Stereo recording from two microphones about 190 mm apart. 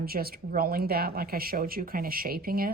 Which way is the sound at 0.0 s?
50° right (ahead or behind).